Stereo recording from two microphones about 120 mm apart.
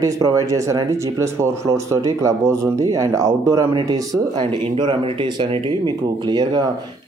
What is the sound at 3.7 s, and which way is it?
Speech, 40° right (ahead or behind).